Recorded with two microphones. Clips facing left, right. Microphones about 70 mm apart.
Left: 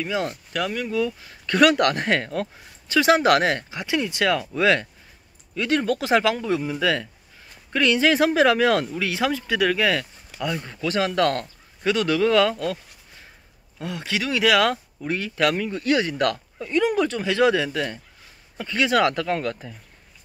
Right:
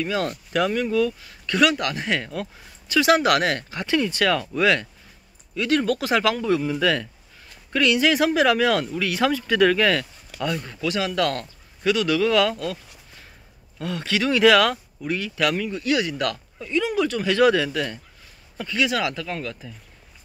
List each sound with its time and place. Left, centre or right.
0.0 s speech: centre
0.5 s speech: centre
1.2 s speech: left
1.6 s speech: left
3.7 s speech: centre
5.5 s speech: left
7.7 s speech: left
9.2 s speech: centre
10.9 s speech: left
13.7 s speech: centre; by 17.2 s left
17.2 s speech: left
18.8 s speech: left